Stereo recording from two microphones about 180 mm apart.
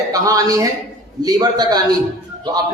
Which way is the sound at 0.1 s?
20° right (ahead or behind).